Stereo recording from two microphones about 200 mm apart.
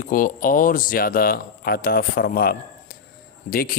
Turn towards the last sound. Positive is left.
turn(degrees=45)  # may be behind; listen again after turning